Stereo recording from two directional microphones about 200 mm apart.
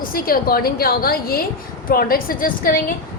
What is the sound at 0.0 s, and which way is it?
A woman's voice, 45° left (ahead or behind).